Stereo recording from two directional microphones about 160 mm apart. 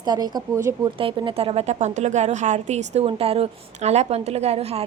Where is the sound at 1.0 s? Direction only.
35° right (ahead or behind).